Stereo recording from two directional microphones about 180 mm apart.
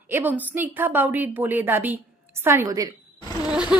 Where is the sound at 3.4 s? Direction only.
5° right (ahead or behind).